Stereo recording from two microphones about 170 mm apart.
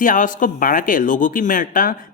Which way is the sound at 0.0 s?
50° left (ahead or behind).